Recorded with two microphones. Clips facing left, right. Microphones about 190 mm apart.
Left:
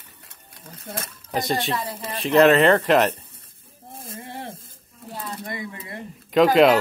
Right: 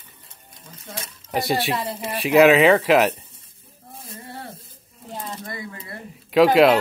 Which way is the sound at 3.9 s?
50° left (ahead or behind).